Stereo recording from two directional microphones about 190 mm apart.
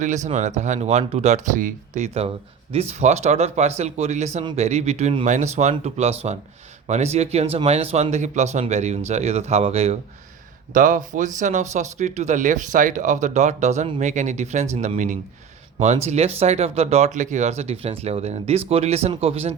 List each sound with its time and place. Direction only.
0.3 s speech: 40° right (ahead or behind)